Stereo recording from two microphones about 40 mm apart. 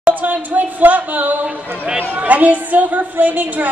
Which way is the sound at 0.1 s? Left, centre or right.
Right.